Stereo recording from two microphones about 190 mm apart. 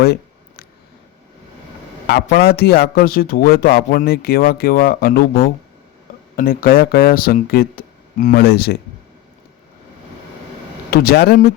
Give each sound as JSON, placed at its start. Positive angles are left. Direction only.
{"t": 0.0, "sound": "a sound", "side_deg": 55}
{"t": 2.0, "sound": "a man's voice", "side_deg": 60}
{"t": 10.9, "sound": "speech", "side_deg": 55}